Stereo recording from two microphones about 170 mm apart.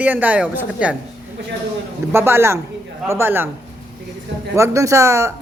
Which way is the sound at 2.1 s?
15° right (ahead or behind).